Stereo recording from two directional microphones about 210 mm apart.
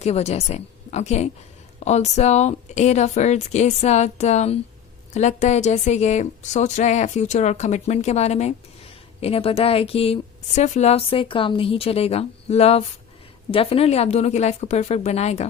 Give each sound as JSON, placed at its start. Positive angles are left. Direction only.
{"t": 0.0, "sound": "speech", "side_deg": 30}